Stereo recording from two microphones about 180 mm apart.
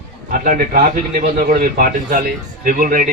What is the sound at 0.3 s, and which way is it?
A man's voice, 50° right (ahead or behind).